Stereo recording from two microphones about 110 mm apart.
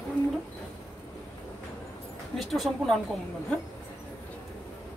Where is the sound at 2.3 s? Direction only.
Centre (ahead or behind).